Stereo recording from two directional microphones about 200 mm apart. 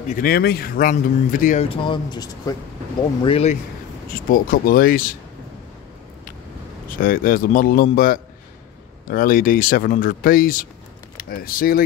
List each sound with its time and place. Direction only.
0.1 s speech: 50° left (ahead or behind)
1.7 s speech: 25° left (ahead or behind)
3.3 s speech: 30° left (ahead or behind)
4.3 s speech: 45° left (ahead or behind)
7.0 s speech: 45° left (ahead or behind)